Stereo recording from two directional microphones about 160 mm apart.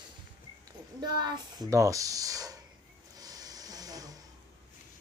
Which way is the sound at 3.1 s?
25° right (ahead or behind).